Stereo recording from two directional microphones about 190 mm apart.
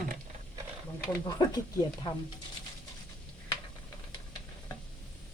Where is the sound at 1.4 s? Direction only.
20° left (ahead or behind).